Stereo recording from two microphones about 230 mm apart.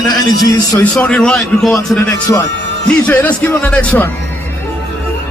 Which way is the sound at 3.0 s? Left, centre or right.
Centre.